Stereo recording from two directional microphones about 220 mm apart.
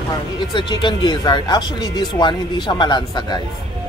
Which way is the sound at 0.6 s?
20° left (ahead or behind).